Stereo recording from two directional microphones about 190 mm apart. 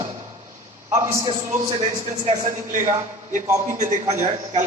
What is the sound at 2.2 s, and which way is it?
Speech, 40° right (ahead or behind).